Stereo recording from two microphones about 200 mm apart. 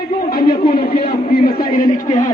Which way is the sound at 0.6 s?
50° left (ahead or behind).